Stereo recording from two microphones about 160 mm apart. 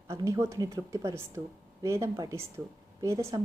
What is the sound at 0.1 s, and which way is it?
A woman's voice, 15° right (ahead or behind).